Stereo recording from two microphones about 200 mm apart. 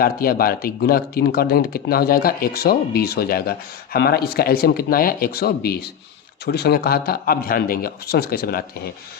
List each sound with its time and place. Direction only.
0.0 s speech: 45° left (ahead or behind)